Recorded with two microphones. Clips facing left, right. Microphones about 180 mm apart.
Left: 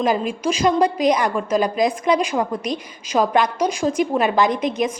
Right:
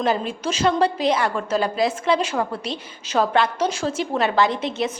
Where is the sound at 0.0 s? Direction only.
10° left (ahead or behind).